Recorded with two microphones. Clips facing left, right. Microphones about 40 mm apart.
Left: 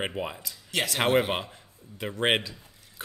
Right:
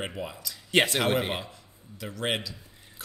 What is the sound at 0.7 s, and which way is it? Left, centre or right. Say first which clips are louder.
Speech: right 6 dB; right.